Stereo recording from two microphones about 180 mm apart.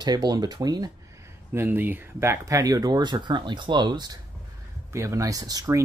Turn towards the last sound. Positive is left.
turn(degrees=-20)  # may be behind; listen again after turning